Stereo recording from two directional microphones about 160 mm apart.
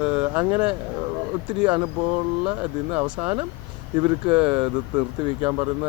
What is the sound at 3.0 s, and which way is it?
Speech, 10° right (ahead or behind).